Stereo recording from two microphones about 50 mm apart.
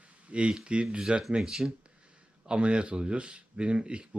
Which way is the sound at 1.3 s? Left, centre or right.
Centre.